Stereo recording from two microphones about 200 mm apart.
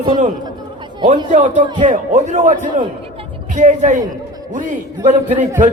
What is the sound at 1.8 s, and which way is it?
A man's voice, 40° right (ahead or behind).